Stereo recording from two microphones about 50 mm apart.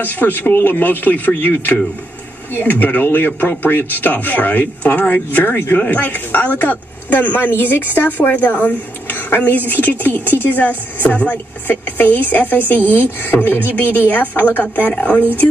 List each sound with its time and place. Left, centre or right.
0.0 s speech: left